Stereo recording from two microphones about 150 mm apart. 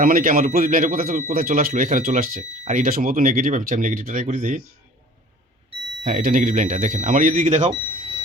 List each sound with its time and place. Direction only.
0.0 s speech: 70° right (ahead or behind)
6.1 s speech: 60° right (ahead or behind)